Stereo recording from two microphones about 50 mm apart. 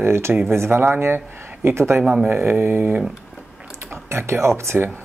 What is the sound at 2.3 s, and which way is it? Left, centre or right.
Speech, right.